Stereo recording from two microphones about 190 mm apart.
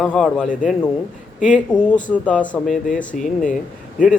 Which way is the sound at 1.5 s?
5° left (ahead or behind).